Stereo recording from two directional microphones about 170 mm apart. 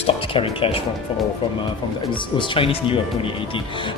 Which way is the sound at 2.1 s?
30° left (ahead or behind).